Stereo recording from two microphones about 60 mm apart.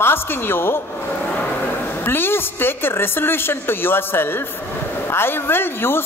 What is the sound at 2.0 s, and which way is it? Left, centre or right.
Speech, left.